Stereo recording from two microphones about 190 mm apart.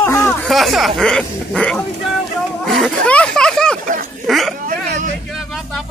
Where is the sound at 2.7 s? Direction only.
5° left (ahead or behind).